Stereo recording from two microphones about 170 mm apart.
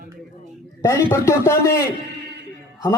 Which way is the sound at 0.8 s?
15° left (ahead or behind).